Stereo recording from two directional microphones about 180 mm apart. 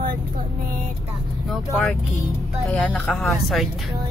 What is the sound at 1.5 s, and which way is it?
Speech, centre (ahead or behind).